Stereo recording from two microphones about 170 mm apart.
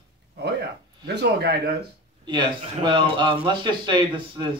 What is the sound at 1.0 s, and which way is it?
Speech, 75° right (ahead or behind).